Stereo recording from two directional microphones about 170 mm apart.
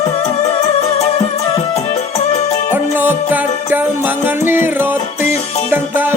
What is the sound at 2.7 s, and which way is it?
Music, 10° right (ahead or behind).